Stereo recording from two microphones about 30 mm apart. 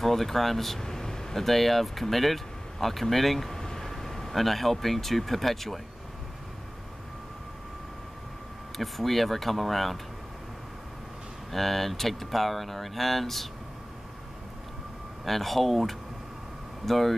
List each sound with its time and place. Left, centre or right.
0.0 s speech: centre
0.8 s air conditioning: left
1.3 s speech: centre
3.5 s speech: centre
8.7 s speech: centre
11.5 s speech: centre
15.2 s speech: centre